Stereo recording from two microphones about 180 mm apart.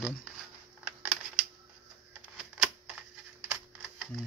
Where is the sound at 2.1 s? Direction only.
10° right (ahead or behind).